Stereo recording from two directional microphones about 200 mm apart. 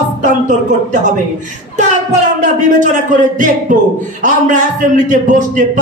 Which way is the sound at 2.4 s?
40° right (ahead or behind).